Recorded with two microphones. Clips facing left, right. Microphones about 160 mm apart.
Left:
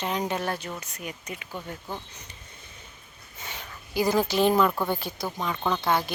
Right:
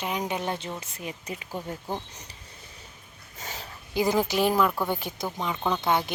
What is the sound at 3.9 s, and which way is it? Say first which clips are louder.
Speech: even; 20° right (ahead or behind).